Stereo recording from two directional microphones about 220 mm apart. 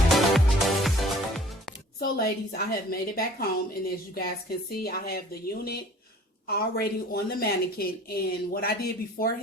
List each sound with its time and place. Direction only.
0.1 s music: centre (ahead or behind)
2.0 s a woman's voice: 45° left (ahead or behind)